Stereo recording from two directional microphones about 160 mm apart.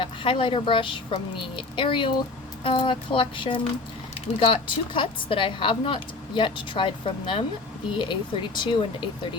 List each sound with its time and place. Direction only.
0.0 s a woman's voice: 35° left (ahead or behind)